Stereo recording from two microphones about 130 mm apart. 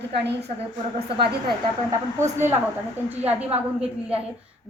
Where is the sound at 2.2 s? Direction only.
20° right (ahead or behind).